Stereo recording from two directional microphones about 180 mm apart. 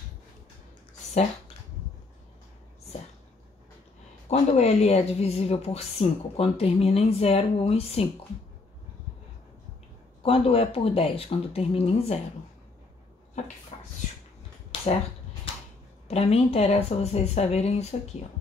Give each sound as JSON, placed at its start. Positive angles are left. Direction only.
{"t": 4.3, "sound": "a woman's voice", "side_deg": 35}
{"t": 10.2, "sound": "a woman's voice", "side_deg": 35}
{"t": 13.7, "sound": "a sound", "side_deg": 35}
{"t": 16.1, "sound": "a woman's voice", "side_deg": 35}